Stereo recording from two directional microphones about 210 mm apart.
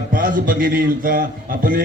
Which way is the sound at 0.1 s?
40° right (ahead or behind).